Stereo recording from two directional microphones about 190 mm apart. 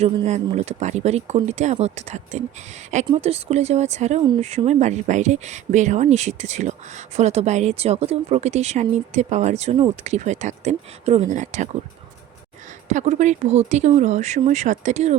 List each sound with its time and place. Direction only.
0.0 s speech: 35° right (ahead or behind)
12.9 s speech: 40° right (ahead or behind)